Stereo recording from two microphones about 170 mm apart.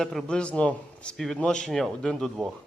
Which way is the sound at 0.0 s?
5° left (ahead or behind).